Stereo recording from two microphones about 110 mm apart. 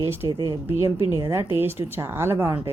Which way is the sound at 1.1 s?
25° right (ahead or behind).